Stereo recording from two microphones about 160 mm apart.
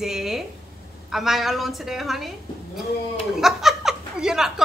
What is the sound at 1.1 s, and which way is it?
Speech, centre (ahead or behind).